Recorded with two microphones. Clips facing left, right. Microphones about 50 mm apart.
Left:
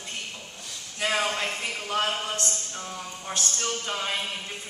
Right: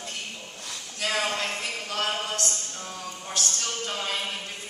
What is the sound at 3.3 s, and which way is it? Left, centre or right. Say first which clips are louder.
Speech: left 1 dB; centre.